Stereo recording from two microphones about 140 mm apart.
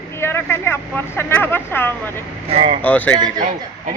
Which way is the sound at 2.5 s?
40° right (ahead or behind).